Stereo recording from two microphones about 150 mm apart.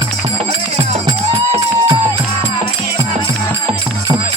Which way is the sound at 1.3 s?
35° right (ahead or behind).